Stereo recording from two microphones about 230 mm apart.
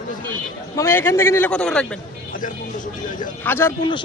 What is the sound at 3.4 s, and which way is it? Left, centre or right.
Speech, centre.